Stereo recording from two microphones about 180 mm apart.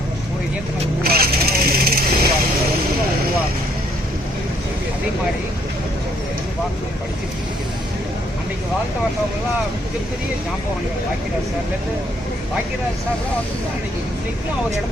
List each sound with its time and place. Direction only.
1.0 s vehicle: 55° right (ahead or behind)